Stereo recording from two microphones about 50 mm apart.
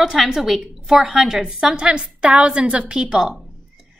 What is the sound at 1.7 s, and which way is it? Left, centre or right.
A woman's voice, centre.